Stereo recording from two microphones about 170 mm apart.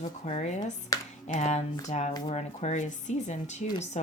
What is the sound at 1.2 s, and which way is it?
Speech, 40° left (ahead or behind).